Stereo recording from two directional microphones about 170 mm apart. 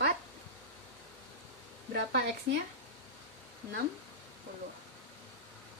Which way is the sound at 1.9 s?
85° right.